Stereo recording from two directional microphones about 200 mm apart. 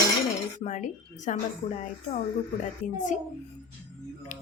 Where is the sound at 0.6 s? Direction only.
35° left (ahead or behind).